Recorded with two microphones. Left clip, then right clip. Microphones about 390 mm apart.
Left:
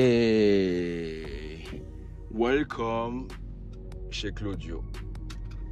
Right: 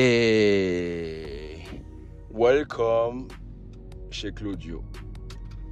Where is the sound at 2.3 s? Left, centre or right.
Centre.